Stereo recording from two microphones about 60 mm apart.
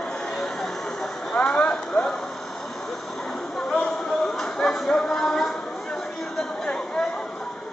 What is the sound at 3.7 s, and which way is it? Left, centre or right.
Music, centre.